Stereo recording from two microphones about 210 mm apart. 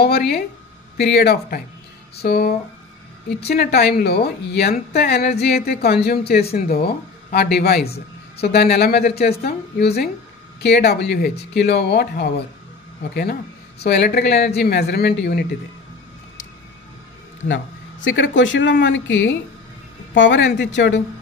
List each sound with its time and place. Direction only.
0.0 s a woman's voice: 50° left (ahead or behind)
18.0 s speech: 60° left (ahead or behind)